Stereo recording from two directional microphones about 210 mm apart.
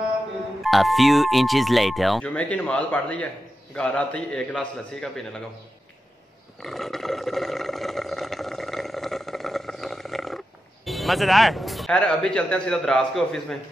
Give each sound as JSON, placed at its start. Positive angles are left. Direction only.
{"t": 0.7, "sound": "speech", "side_deg": 0}
{"t": 6.6, "sound": "a sound", "side_deg": 0}
{"t": 10.9, "sound": "speech", "side_deg": 0}